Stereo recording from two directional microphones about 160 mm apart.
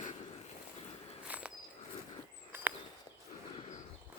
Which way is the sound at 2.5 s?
15° right (ahead or behind).